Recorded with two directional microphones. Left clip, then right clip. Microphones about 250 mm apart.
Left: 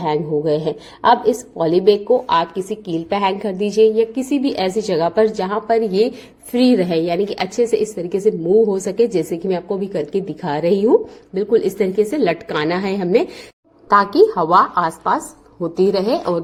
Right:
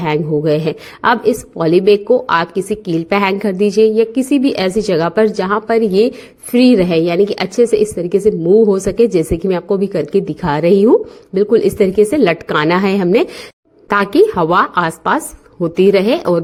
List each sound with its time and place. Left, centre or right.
0.0 s a woman's voice: right
13.9 s a woman's voice: right
14.8 s a woman's voice: right